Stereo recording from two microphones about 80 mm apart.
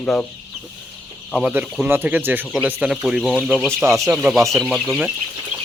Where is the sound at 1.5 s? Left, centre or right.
Right.